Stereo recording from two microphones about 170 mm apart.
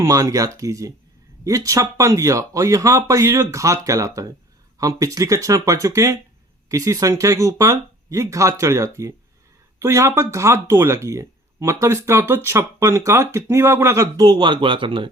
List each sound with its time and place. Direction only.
0.0 s speech: 20° right (ahead or behind)